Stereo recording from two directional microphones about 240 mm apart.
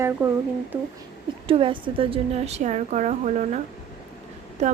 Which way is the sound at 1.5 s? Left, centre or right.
Right.